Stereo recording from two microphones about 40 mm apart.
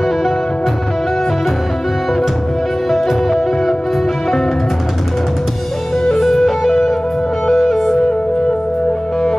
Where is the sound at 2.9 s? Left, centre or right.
Centre.